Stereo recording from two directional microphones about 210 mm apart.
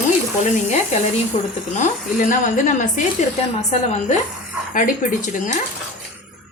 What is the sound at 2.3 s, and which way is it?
Speech, 35° left (ahead or behind).